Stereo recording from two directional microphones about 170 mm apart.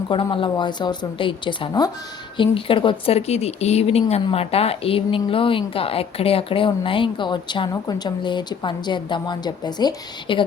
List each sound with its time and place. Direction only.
0.1 s a woman's voice: 30° left (ahead or behind)